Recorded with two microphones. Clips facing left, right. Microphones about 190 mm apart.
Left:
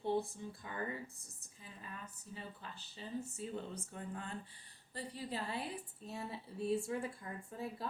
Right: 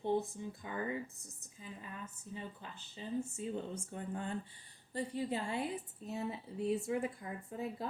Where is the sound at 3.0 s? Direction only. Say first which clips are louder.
Right 4 dB; 20° right (ahead or behind).